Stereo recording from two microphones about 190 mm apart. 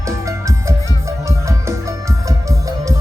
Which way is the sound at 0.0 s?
15° right (ahead or behind).